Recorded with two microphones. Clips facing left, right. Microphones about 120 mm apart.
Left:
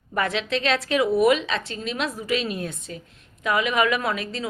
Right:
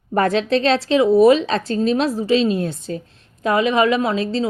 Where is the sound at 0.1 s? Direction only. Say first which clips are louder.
Right 8 dB; 40° right (ahead or behind).